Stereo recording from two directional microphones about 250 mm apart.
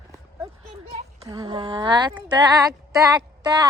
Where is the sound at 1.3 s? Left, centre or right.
Centre.